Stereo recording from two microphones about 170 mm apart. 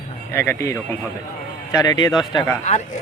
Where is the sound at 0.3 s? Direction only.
15° left (ahead or behind).